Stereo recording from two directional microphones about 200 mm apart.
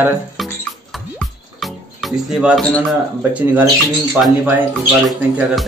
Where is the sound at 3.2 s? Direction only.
10° right (ahead or behind).